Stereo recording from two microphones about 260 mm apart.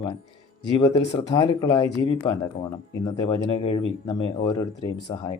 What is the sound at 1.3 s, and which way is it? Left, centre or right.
Speech, centre.